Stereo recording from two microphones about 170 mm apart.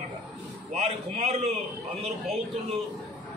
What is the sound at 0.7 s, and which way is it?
Speech, 40° right (ahead or behind).